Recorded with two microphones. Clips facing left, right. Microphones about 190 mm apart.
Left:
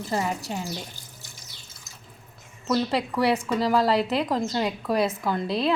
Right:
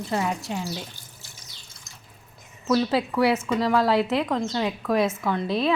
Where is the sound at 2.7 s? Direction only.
Centre (ahead or behind).